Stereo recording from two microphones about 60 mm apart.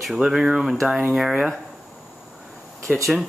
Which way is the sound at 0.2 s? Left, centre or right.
Right.